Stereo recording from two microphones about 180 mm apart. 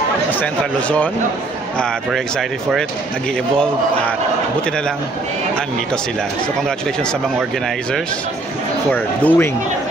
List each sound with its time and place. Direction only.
0.3 s speech: 10° left (ahead or behind)
8.9 s speech: 10° left (ahead or behind)